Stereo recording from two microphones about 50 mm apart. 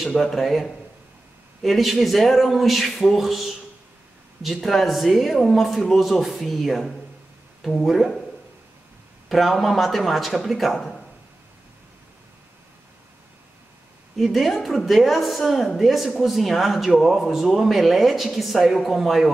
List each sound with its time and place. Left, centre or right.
0.2 s a woman's voice: centre
4.6 s a woman's voice: centre
9.3 s a woman's voice: centre
14.1 s a woman's voice: centre